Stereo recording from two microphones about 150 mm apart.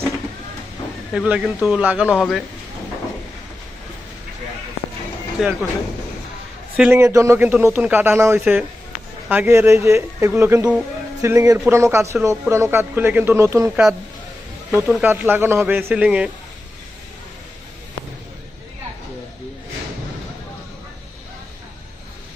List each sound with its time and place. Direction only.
1.1 s speech: 5° right (ahead or behind)
5.4 s speech: centre (ahead or behind)
6.7 s a man's voice: 5° right (ahead or behind)
7.0 s speech: 20° right (ahead or behind)